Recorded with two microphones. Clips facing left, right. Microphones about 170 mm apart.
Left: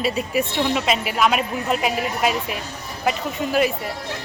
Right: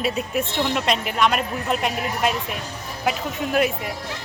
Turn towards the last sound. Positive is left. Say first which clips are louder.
# left 1 dB
turn(degrees=0)  # may be behind; listen again after turning